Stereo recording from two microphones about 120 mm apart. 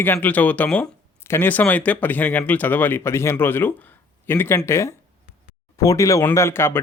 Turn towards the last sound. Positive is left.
turn(degrees=20)  # may be behind; listen again after turning